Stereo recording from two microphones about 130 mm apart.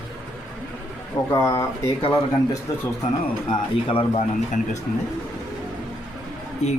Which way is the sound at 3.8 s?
45° left (ahead or behind).